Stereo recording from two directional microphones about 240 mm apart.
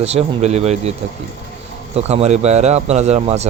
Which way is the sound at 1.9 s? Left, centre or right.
Right.